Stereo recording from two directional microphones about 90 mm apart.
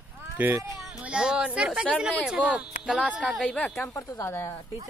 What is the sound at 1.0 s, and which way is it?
Speech, 10° right (ahead or behind).